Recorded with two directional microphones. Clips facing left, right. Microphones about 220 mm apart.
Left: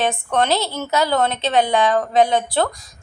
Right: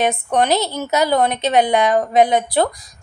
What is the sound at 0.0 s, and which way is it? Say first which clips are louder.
A woman's voice: right 2 dB; 20° right (ahead or behind).